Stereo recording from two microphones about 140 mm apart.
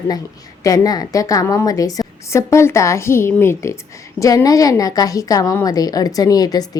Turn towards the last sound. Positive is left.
turn(degrees=25)  # may be behind; listen again after turning